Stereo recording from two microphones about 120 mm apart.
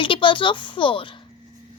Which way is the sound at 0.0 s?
45° left (ahead or behind).